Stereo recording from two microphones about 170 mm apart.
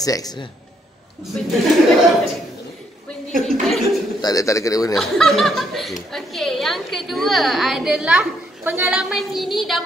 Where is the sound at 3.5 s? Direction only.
Centre (ahead or behind).